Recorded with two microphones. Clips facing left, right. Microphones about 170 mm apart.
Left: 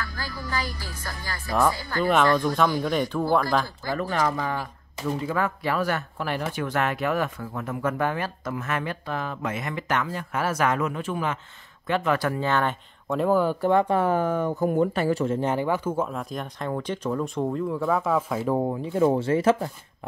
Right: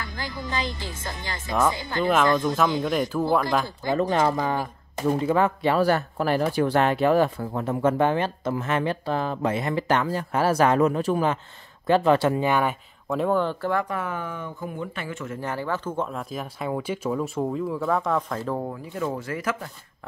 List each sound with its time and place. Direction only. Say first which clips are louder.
0.0 s speech: right 1 dB; 20° right (ahead or behind)
2.3 s speech: even; centre (ahead or behind)
3.6 s speech: right 5 dB; 20° right (ahead or behind); by 13.7 s 10° left (ahead or behind)
13.7 s speech: left 6 dB; 25° left (ahead or behind)
15.4 s speech: left 4 dB; 20° left (ahead or behind)
18.6 s speech: left 7 dB; 25° left (ahead or behind)